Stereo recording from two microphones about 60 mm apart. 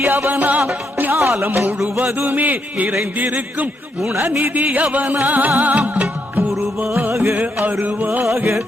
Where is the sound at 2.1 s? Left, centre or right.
Right.